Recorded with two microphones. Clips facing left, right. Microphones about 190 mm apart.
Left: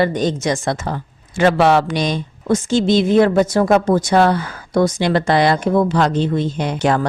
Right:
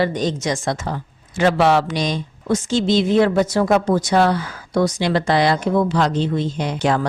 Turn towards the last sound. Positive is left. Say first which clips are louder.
# left 2 dB
turn(degrees=55)  # may be behind; listen again after turning